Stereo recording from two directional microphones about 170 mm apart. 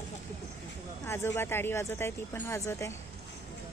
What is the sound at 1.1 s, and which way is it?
Speech, 15° left (ahead or behind).